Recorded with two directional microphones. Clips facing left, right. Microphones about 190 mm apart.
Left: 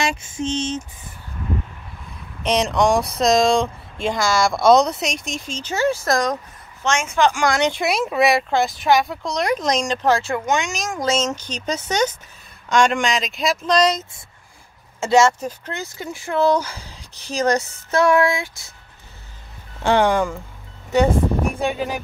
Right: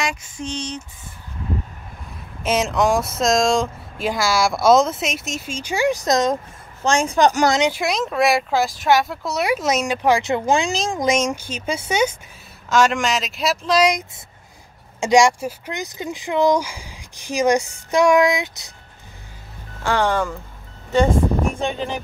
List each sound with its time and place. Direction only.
0.0 s a sound: 25° left (ahead or behind)
2.4 s speech: centre (ahead or behind); by 7.4 s 40° right (ahead or behind)
7.8 s speech: 5° left (ahead or behind); by 10.3 s 10° right (ahead or behind)
10.3 s speech: 30° right (ahead or behind)
11.0 s speech: 15° right (ahead or behind)
19.8 s speech: 15° left (ahead or behind)
21.5 s speech: 10° left (ahead or behind)